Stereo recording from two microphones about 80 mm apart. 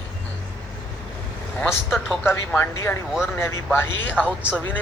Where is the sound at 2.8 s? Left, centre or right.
Left.